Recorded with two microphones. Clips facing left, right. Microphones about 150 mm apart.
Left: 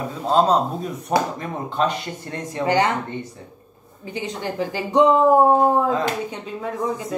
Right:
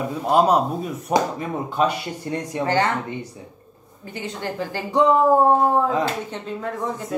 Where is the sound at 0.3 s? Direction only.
10° right (ahead or behind).